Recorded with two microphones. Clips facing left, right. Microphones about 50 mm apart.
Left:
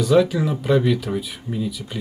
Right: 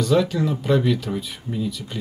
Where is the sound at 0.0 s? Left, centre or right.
Centre.